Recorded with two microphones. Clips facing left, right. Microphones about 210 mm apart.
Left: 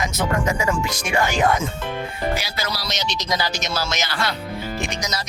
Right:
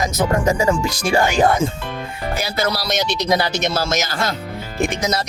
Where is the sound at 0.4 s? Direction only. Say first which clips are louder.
Right 5 dB; 35° right (ahead or behind).